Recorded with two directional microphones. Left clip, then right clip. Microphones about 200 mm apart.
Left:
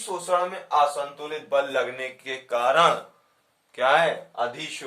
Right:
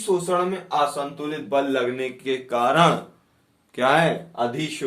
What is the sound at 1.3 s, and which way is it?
A man's voice, 20° left (ahead or behind).